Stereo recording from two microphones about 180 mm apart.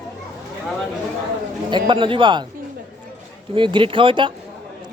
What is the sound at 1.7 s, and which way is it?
Speech, 25° right (ahead or behind).